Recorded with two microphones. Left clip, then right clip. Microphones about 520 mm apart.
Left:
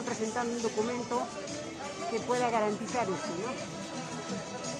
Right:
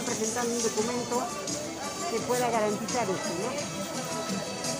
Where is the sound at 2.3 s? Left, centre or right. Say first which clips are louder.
Right 2 dB; left.